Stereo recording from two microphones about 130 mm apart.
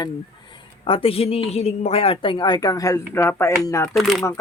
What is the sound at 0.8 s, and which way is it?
A woman's voice, 45° left (ahead or behind).